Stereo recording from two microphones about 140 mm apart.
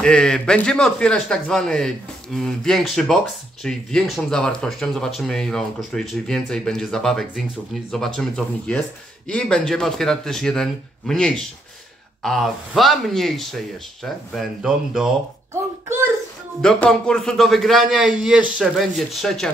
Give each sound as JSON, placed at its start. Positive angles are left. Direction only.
{"t": 0.0, "sound": "speech", "side_deg": 5}
{"t": 15.5, "sound": "a child's voice", "side_deg": -15}
{"t": 16.6, "sound": "speech", "side_deg": 5}